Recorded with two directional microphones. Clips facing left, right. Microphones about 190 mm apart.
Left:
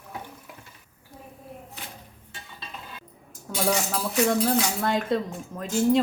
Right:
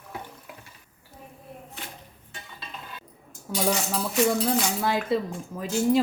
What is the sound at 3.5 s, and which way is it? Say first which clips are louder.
Cutlery: even; centre (ahead or behind).